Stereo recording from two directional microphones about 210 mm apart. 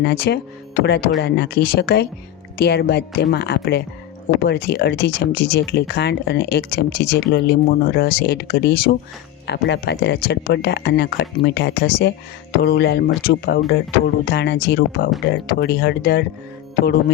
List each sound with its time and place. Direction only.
0.0 s speech: 50° left (ahead or behind)